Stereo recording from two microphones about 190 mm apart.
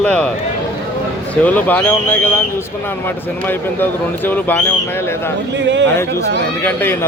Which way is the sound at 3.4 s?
10° left (ahead or behind).